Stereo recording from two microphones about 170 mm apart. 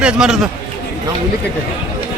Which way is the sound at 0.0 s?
5° right (ahead or behind).